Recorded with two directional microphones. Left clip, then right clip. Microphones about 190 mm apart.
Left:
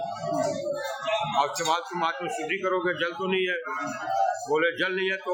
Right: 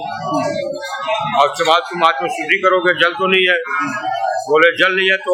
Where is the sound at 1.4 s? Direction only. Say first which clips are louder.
Right 15 dB; 25° left (ahead or behind).